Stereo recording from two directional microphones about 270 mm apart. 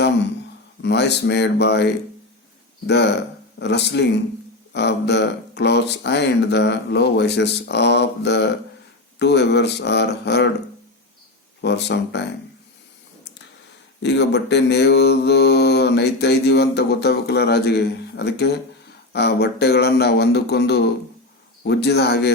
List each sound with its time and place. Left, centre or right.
0.8 s mantra: left
11.6 s mantra: left
14.0 s mantra: left